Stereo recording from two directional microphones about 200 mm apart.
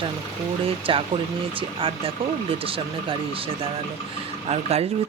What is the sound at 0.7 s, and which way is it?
Speech, 25° right (ahead or behind).